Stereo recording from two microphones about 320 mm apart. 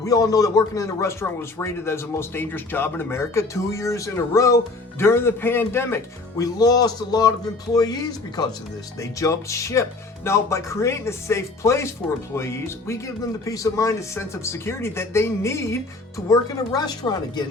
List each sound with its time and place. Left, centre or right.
0.0 s a man's voice: centre